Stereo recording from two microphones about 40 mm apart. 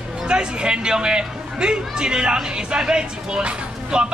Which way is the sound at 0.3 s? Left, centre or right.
Right.